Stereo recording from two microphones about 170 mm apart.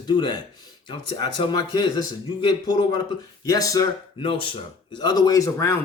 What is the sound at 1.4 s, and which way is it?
Speech, 30° left (ahead or behind).